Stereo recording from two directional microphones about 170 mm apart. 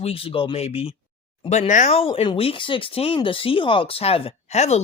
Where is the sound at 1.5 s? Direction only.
45° left (ahead or behind).